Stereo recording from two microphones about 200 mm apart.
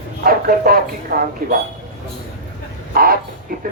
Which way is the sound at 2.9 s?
50° right (ahead or behind).